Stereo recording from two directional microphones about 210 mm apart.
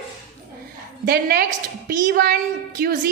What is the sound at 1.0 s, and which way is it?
A woman's voice, 45° right (ahead or behind).